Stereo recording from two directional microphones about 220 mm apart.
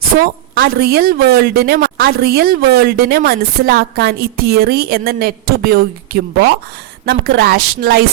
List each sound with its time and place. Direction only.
0.2 s a woman's voice: 45° right (ahead or behind)